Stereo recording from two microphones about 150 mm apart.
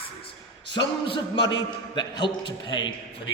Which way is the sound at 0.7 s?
30° left (ahead or behind).